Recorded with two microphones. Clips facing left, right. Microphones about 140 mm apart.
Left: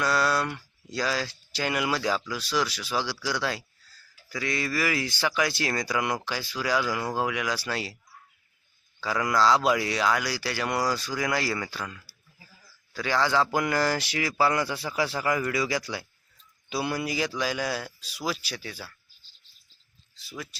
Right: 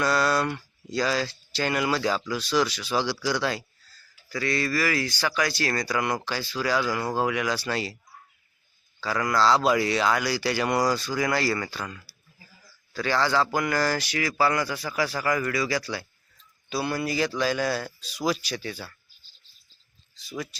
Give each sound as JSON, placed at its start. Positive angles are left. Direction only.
{"t": 0.0, "sound": "speech", "side_deg": 5}
{"t": 9.0, "sound": "speech", "side_deg": 10}
{"t": 20.2, "sound": "speech", "side_deg": 5}